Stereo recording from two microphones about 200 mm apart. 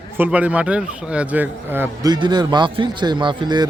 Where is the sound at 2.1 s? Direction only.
20° right (ahead or behind).